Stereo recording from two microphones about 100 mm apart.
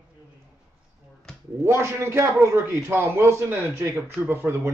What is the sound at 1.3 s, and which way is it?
Finger snapping, 5° left (ahead or behind).